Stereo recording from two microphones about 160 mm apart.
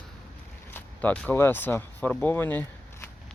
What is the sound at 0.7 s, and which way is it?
Speech, 10° left (ahead or behind).